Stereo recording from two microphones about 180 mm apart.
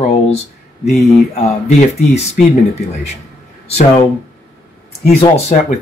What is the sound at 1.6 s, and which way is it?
Speech, 40° left (ahead or behind).